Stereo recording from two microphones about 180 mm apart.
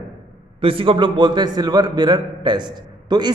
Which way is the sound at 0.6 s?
30° right (ahead or behind).